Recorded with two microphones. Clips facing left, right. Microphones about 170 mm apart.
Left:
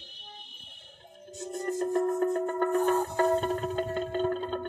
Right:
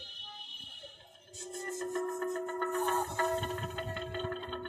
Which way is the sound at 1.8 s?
30° left (ahead or behind).